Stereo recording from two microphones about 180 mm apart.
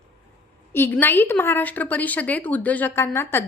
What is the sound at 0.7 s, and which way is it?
A woman's voice, 10° left (ahead or behind).